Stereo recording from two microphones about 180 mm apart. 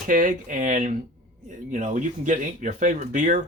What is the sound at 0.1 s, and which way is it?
Speech, 50° right (ahead or behind).